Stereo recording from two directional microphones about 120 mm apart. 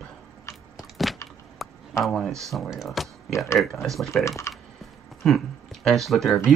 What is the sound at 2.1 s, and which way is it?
Speech, 5° left (ahead or behind).